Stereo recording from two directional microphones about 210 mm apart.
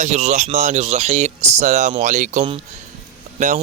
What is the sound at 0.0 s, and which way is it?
Speech, 30° right (ahead or behind).